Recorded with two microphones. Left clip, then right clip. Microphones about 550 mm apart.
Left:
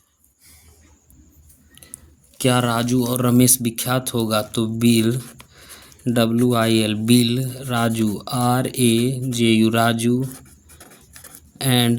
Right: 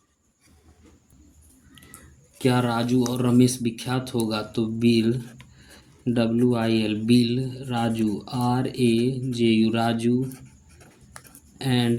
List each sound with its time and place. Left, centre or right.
2.4 s a man's voice: left
10.2 s a sound: left
11.5 s speech: left